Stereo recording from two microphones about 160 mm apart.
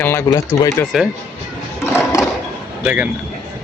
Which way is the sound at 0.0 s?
15° left (ahead or behind).